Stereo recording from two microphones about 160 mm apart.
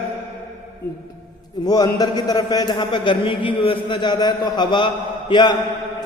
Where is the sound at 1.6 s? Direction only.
25° left (ahead or behind).